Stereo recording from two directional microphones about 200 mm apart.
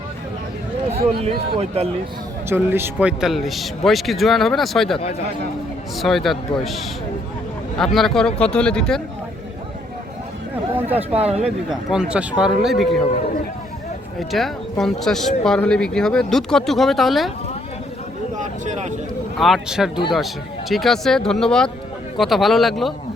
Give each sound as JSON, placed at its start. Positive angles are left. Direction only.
{"t": 0.9, "sound": "speech", "side_deg": -30}
{"t": 2.5, "sound": "speech", "side_deg": -10}
{"t": 6.0, "sound": "speech", "side_deg": 0}
{"t": 7.9, "sound": "speech", "side_deg": 0}
{"t": 10.8, "sound": "a sound", "side_deg": -10}
{"t": 11.1, "sound": "speech", "side_deg": -30}
{"t": 11.4, "sound": "speech", "side_deg": -5}
{"t": 14.2, "sound": "speech", "side_deg": 0}
{"t": 18.3, "sound": "a sound", "side_deg": -40}
{"t": 19.4, "sound": "speech", "side_deg": 0}